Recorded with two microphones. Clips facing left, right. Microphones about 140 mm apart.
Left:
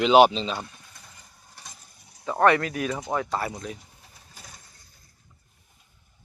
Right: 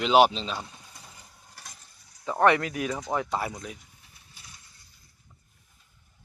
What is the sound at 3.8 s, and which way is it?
Pigeon, 40° left (ahead or behind).